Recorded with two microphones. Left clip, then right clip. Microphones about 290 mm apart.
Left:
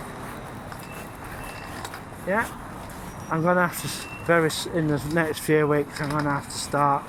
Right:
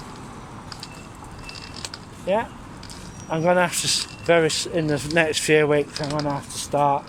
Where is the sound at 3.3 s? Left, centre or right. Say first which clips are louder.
Right 3 dB; right.